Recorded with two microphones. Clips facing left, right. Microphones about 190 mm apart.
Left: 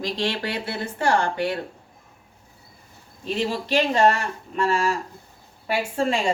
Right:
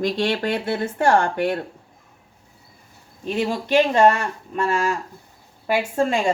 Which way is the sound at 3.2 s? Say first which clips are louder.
Right 2 dB; 50° right (ahead or behind).